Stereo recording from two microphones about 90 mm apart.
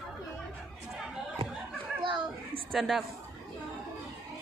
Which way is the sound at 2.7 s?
Centre (ahead or behind).